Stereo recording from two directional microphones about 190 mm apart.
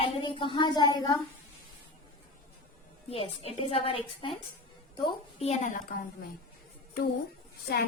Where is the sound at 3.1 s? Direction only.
30° left (ahead or behind).